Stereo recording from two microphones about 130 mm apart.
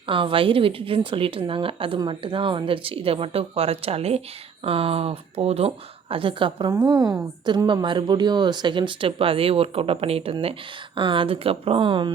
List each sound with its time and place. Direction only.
0.1 s a woman's voice: 40° right (ahead or behind)
6.7 s a woman's voice: 25° right (ahead or behind)